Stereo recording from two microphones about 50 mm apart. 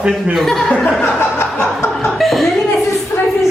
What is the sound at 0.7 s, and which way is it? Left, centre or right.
Speech, centre.